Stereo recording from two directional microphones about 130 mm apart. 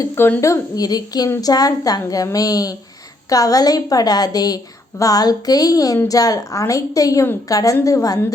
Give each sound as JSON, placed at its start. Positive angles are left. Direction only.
{"t": 0.0, "sound": "a woman's voice", "side_deg": 20}